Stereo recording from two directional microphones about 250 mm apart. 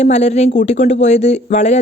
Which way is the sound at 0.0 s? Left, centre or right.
Left.